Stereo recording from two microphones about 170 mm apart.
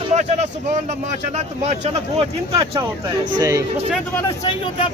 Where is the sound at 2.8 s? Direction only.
25° right (ahead or behind).